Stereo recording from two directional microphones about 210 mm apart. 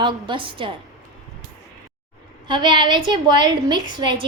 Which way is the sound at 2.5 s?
20° right (ahead or behind).